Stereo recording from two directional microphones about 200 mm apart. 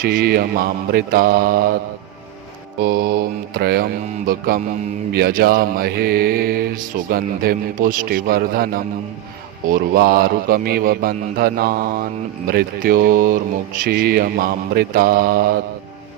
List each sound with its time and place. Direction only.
0.0 s mantra: 50° right (ahead or behind)
2.8 s mantra: 50° right (ahead or behind)